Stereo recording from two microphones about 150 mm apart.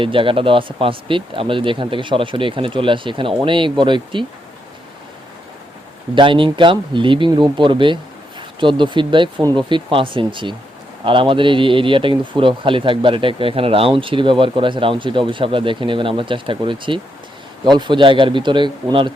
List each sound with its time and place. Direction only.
0.0 s a man's voice: 35° right (ahead or behind)
6.1 s a man's voice: 35° right (ahead or behind)